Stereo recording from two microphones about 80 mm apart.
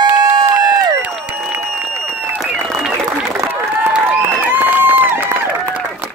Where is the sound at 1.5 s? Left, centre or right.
Right.